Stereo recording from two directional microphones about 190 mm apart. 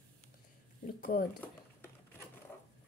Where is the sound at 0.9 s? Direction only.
50° left (ahead or behind).